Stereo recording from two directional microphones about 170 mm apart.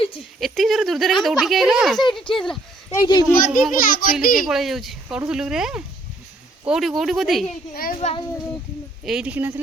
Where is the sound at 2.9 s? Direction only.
25° left (ahead or behind).